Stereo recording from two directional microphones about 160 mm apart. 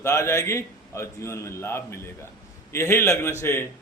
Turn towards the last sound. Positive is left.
turn(degrees=15)  # may be behind; listen again after turning